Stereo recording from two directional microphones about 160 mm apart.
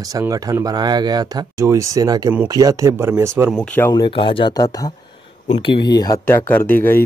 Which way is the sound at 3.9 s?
30° left (ahead or behind).